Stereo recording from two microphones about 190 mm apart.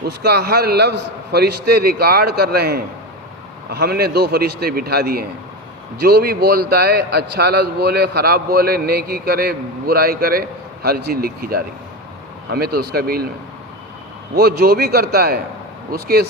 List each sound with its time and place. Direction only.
0.0 s a man's voice: 60° right (ahead or behind)
14.3 s a man's voice: 55° right (ahead or behind)